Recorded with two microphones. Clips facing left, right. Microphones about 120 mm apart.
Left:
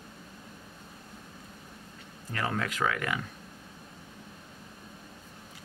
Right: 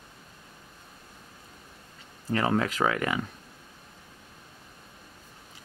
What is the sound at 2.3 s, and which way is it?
Speech, 30° right (ahead or behind).